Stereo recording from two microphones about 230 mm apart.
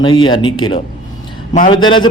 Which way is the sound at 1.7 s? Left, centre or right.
Centre.